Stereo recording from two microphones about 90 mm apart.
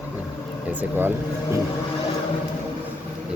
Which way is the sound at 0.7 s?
20° right (ahead or behind).